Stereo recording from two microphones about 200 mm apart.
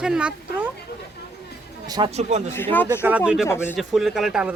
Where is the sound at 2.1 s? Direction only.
35° right (ahead or behind).